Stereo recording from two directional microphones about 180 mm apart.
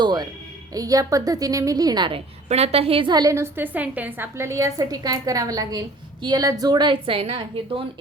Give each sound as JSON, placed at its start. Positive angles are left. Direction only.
{"t": 0.0, "sound": "music", "side_deg": -25}
{"t": 0.7, "sound": "a woman's voice", "side_deg": -20}